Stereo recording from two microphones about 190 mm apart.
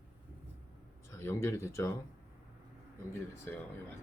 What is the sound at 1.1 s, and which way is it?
Speech, 15° left (ahead or behind).